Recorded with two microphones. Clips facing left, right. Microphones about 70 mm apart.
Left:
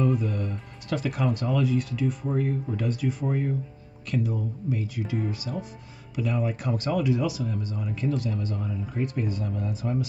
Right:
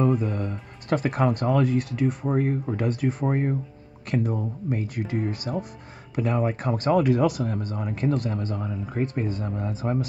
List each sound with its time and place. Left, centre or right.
0.0 s speech: right